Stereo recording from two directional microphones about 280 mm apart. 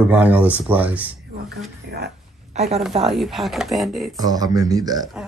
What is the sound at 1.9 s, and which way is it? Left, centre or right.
Speech, right.